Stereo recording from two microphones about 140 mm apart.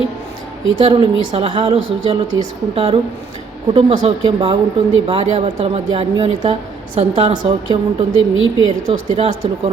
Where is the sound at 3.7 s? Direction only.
45° right (ahead or behind).